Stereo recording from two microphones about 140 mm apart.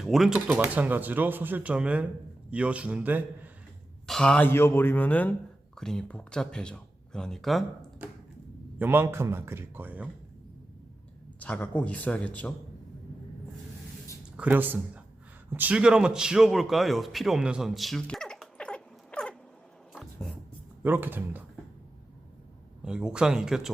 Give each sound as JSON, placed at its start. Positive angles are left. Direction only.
{"t": 0.0, "sound": "speech", "side_deg": 0}
{"t": 4.0, "sound": "speech", "side_deg": 5}
{"t": 8.8, "sound": "speech", "side_deg": -15}
{"t": 11.3, "sound": "speech", "side_deg": 10}
{"t": 14.3, "sound": "a man's voice", "side_deg": -10}
{"t": 19.9, "sound": "music", "side_deg": 0}
{"t": 20.8, "sound": "speech", "side_deg": -15}
{"t": 22.8, "sound": "speech", "side_deg": -5}